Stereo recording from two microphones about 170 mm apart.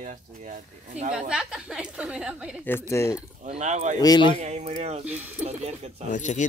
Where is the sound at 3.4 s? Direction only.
40° right (ahead or behind).